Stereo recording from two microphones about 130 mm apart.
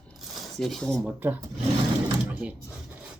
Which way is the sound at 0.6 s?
5° left (ahead or behind).